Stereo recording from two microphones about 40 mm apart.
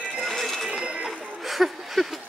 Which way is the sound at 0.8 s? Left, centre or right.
Right.